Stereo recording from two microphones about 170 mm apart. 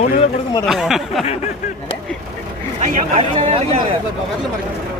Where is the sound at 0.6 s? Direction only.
Centre (ahead or behind).